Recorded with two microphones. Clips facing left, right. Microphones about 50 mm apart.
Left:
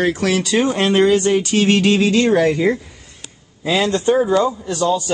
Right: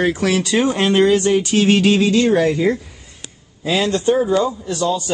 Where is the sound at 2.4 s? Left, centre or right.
Centre.